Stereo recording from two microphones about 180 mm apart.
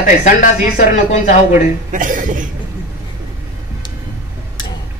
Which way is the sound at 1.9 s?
45° right (ahead or behind).